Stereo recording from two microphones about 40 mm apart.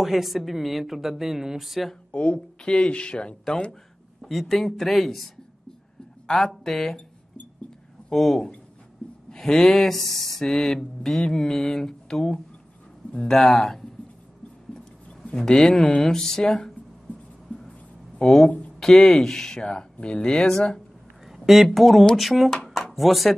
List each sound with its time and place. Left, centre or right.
0.0 s speech: centre
2.1 s speech: left
4.2 s speech: centre
6.2 s mantra: centre
8.1 s mantra: centre
14.7 s a sound: centre
16.0 s mantra: centre
17.5 s a sound: centre
18.8 s mantra: centre
19.6 s speech: left
21.3 s a sound: centre
21.7 s speech: centre
22.7 s a sound: centre